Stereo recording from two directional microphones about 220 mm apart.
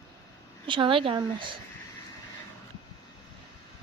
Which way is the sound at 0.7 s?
25° right (ahead or behind).